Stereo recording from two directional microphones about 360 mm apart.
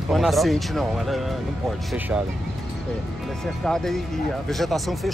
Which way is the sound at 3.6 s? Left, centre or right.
Centre.